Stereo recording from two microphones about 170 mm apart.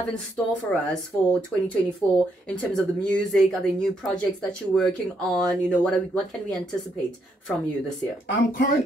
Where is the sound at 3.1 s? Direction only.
5° left (ahead or behind).